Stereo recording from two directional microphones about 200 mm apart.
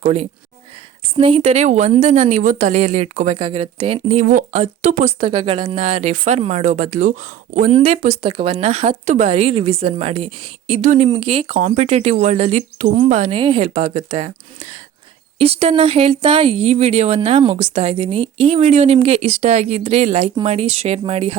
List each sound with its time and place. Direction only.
0.0 s a woman's voice: 35° right (ahead or behind)